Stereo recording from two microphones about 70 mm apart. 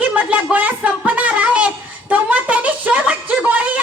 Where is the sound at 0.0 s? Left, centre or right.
Right.